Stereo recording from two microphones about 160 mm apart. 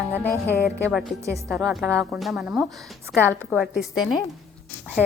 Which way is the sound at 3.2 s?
10° left (ahead or behind).